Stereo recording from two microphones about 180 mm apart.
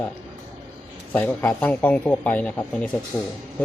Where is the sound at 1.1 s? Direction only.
10° left (ahead or behind).